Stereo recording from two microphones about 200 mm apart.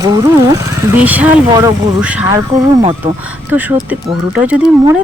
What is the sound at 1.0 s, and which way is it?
Speech, 5° right (ahead or behind).